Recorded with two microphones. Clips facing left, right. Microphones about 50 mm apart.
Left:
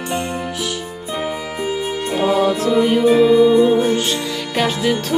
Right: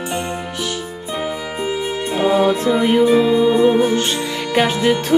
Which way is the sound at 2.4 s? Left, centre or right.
Centre.